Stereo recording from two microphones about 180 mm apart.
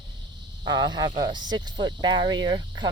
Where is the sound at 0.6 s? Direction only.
25° right (ahead or behind).